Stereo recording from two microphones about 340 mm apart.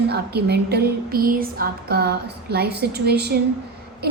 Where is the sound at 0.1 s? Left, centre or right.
Right.